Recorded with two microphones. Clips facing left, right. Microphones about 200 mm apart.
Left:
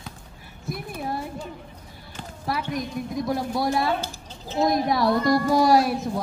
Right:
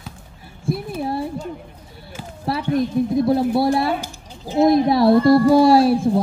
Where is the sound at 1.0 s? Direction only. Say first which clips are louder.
Right 5 dB; 30° right (ahead or behind).